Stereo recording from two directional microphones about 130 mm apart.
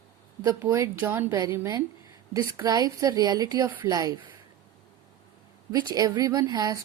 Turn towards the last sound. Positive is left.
turn(degrees=-30)  # may be behind; listen again after turning